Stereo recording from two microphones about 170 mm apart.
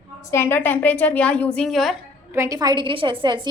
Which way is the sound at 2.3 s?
20° right (ahead or behind).